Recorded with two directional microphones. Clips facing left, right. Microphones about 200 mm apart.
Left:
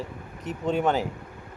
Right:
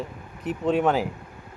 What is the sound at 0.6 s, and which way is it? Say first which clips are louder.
Speech: right 2 dB; 5° right (ahead or behind).